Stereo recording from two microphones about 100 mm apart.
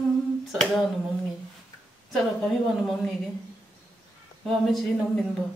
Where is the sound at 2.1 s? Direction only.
5° left (ahead or behind).